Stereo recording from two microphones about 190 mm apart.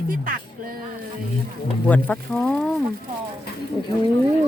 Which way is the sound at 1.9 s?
5° left (ahead or behind).